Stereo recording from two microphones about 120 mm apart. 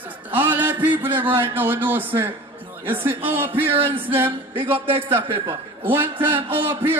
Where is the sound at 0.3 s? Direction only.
15° right (ahead or behind).